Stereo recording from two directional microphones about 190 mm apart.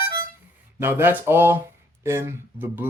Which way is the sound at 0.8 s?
10° right (ahead or behind).